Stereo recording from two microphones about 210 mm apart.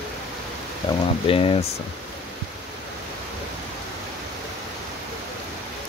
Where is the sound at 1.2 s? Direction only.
25° left (ahead or behind).